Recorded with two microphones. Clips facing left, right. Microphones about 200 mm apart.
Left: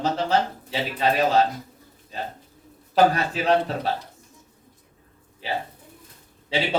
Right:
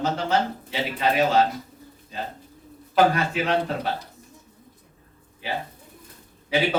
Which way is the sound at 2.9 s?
35° left (ahead or behind).